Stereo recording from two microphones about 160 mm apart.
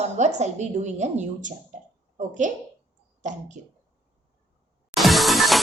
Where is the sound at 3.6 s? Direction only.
50° right (ahead or behind).